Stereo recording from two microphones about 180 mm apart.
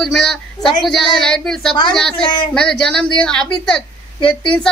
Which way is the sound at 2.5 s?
5° left (ahead or behind).